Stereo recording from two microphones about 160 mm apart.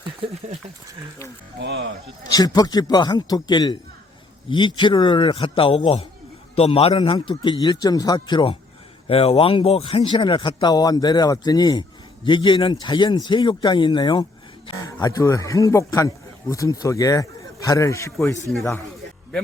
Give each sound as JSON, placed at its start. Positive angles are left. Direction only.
{"t": 0.2, "sound": "speech", "side_deg": -35}
{"t": 1.6, "sound": "speech", "side_deg": -90}
{"t": 2.3, "sound": "a man's voice", "side_deg": 25}